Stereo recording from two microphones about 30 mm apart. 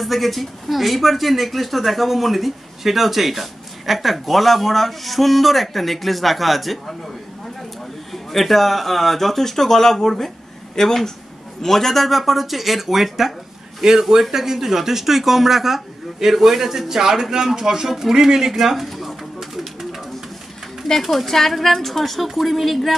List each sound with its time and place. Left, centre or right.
0.0 s speech: centre
8.1 s a woman's voice: centre
17.8 s speech: centre
18.1 s speech: centre
18.5 s speech: centre
18.9 s a sound: centre
21.0 s a woman's voice: centre